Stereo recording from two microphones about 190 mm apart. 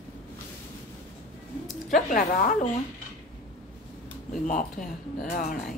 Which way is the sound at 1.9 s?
45° left (ahead or behind).